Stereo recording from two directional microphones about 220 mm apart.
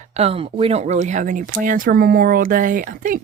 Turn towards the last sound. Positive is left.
turn(degrees=-40)  # may be behind; listen again after turning